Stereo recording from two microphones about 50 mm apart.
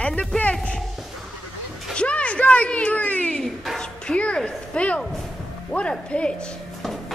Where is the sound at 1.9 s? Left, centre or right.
Left.